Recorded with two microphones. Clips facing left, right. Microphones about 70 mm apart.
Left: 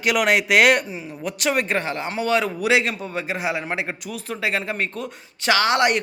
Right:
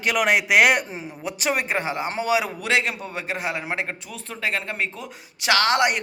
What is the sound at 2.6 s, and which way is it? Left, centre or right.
Speech, centre.